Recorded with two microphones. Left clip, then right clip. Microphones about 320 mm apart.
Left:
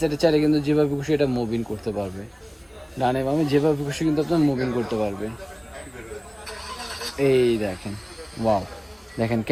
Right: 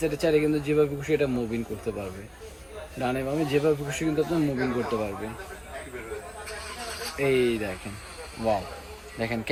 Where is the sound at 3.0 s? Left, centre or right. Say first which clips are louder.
Left 5 dB; left.